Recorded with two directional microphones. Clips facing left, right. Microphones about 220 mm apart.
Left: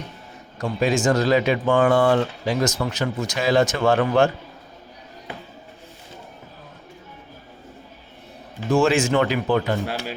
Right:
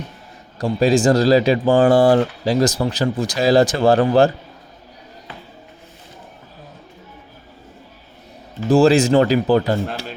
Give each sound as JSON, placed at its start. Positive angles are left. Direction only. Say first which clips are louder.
{"t": 0.6, "sound": "speech", "louder": "right 5 dB", "side_deg": -35}
{"t": 8.7, "sound": "speech", "louder": "right 6 dB", "side_deg": -35}